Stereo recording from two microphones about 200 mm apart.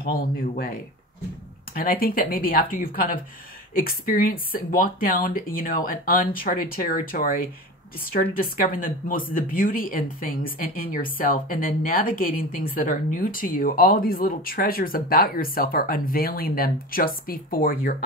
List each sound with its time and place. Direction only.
0.0 s speech: 45° left (ahead or behind)
1.8 s speech: 45° left (ahead or behind)